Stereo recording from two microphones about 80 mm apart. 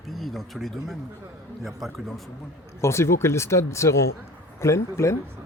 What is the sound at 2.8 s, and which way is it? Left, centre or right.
Speech, left.